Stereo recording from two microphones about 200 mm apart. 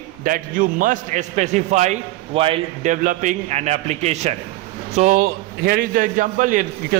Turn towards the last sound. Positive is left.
turn(degrees=-40)  # may be behind; listen again after turning